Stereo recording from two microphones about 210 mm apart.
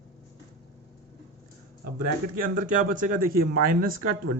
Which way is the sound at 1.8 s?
40° right (ahead or behind).